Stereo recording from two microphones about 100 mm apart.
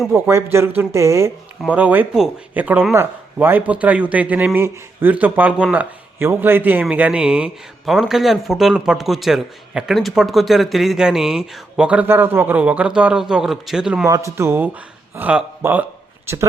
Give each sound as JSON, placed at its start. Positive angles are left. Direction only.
{"t": 0.1, "sound": "speech", "side_deg": -25}
{"t": 1.7, "sound": "speech", "side_deg": -15}
{"t": 14.1, "sound": "speech", "side_deg": -30}